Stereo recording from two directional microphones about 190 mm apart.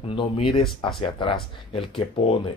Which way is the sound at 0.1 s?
25° left (ahead or behind).